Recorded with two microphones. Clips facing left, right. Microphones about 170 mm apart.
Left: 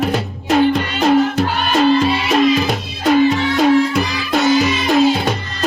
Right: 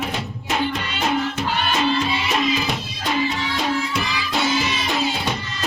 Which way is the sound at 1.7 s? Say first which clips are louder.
Left 9 dB; 50° left (ahead or behind).